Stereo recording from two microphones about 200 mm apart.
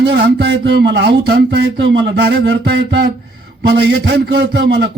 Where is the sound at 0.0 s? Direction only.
55° right (ahead or behind).